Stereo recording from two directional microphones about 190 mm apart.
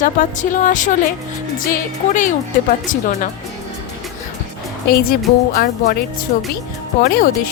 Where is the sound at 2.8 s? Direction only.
45° left (ahead or behind).